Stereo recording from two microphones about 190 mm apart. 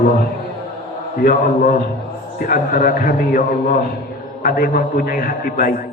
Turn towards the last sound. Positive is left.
turn(degrees=50)  # may be behind; listen again after turning